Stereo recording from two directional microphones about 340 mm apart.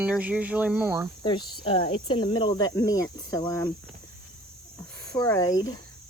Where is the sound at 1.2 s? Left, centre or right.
Centre.